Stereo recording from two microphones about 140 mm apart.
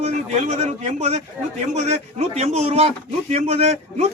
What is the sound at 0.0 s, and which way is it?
A man's voice, 50° right (ahead or behind).